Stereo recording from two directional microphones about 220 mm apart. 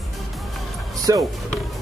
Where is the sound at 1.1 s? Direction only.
15° right (ahead or behind).